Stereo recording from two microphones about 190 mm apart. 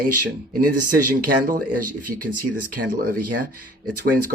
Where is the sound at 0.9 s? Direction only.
50° right (ahead or behind).